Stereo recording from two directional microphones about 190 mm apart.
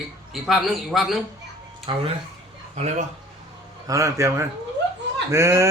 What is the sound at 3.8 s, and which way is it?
A man's voice, 15° right (ahead or behind).